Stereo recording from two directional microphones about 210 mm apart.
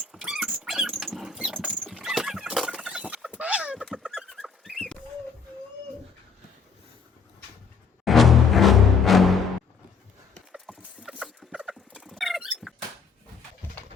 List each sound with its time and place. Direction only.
0.0 s dog: centre (ahead or behind)
8.0 s music: centre (ahead or behind)
10.5 s chicken: 5° right (ahead or behind)